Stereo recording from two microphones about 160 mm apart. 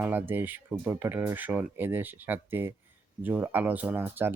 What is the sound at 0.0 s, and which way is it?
Speech, 10° right (ahead or behind).